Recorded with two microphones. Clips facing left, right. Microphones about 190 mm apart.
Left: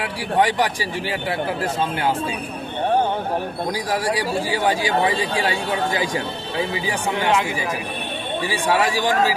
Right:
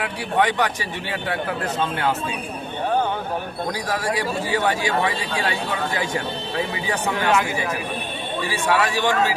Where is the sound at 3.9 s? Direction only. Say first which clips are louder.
Left 2 dB; 15° left (ahead or behind).